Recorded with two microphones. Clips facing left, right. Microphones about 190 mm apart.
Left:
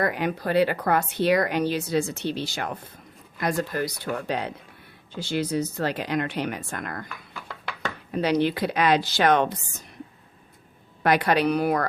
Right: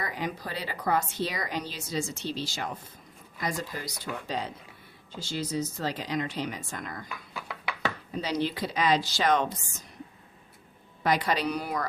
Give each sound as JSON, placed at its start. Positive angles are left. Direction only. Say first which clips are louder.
{"t": 0.0, "sound": "speech", "louder": "left 8 dB", "side_deg": 65}
{"t": 7.4, "sound": "a sound", "louder": "left 1 dB", "side_deg": -5}
{"t": 8.1, "sound": "speech", "louder": "left 9 dB", "side_deg": 65}
{"t": 11.0, "sound": "speech", "louder": "left 6 dB", "side_deg": 60}